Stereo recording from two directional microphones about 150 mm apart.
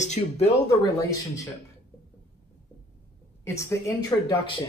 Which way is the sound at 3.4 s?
20° left (ahead or behind).